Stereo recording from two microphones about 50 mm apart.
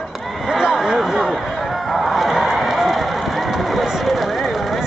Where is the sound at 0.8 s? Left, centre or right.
Centre.